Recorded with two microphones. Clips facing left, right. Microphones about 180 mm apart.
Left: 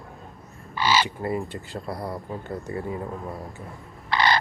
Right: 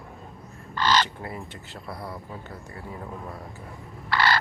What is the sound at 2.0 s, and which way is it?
Speech, 40° left (ahead or behind).